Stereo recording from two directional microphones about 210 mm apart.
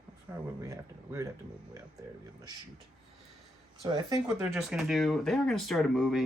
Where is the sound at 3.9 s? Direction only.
15° right (ahead or behind).